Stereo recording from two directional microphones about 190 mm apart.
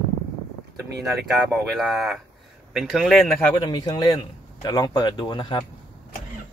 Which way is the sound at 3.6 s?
20° left (ahead or behind).